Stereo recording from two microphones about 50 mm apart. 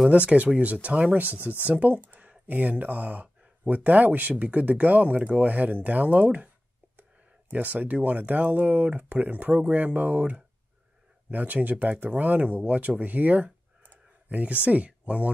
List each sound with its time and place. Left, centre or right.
0.1 s speech: right
2.0 s a sound: right
2.4 s speech: right